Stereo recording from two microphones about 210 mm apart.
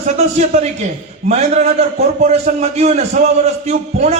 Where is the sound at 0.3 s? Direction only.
35° right (ahead or behind).